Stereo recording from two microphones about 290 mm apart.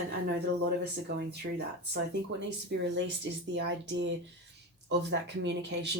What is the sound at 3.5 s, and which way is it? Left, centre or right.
Speech, right.